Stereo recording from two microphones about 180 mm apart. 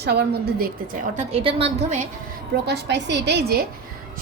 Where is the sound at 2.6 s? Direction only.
70° right (ahead or behind).